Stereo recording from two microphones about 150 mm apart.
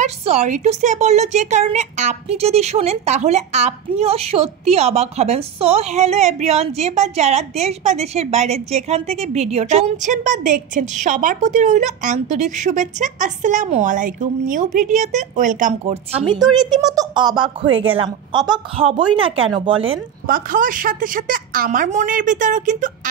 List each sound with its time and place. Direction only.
0.0 s a woman's voice: 45° right (ahead or behind)
16.3 s a woman's voice: 30° right (ahead or behind)
20.2 s a woman's voice: 70° right (ahead or behind)